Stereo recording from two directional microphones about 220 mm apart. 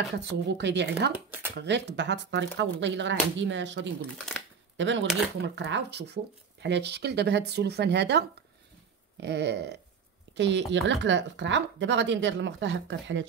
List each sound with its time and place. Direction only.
0.2 s speech: 50° right (ahead or behind)
1.1 s speech: 10° right (ahead or behind)
1.6 s speech: 50° right (ahead or behind)
4.3 s a sound: centre (ahead or behind)
4.7 s speech: 55° right (ahead or behind)